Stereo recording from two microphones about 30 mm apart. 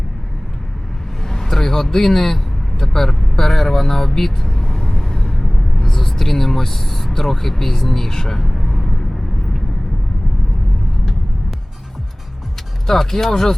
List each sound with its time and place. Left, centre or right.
1.2 s vehicle: centre
2.0 s speech: centre
4.5 s vehicle: left
7.2 s speech: centre
12.9 s speech: centre